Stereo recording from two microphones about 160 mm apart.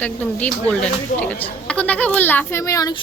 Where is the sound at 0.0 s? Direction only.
10° left (ahead or behind).